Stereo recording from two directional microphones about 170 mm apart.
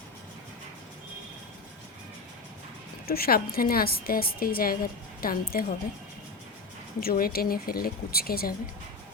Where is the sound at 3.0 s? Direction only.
65° left (ahead or behind).